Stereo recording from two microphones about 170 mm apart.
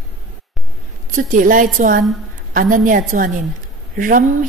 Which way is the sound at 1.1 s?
50° right (ahead or behind).